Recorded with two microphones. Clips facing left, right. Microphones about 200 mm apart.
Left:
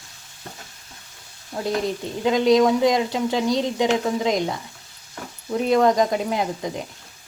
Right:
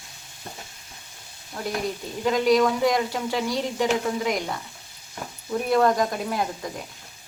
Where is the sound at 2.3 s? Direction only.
20° left (ahead or behind).